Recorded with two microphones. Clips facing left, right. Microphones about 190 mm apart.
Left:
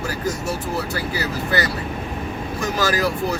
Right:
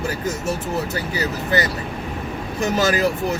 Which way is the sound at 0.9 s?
20° right (ahead or behind).